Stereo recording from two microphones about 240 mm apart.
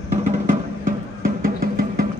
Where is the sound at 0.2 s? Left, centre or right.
Right.